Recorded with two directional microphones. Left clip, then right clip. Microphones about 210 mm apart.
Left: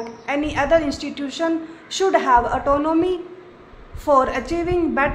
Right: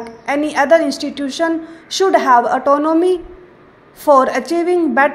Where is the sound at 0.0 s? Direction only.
25° right (ahead or behind).